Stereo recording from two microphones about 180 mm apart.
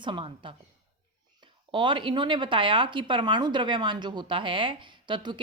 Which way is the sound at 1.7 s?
25° right (ahead or behind).